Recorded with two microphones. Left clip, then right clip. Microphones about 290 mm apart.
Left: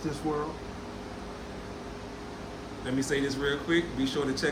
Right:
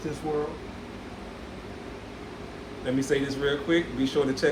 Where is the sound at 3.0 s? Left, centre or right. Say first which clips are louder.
Right 2 dB; centre.